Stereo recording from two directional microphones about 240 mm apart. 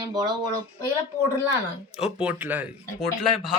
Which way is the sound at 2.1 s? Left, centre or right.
Centre.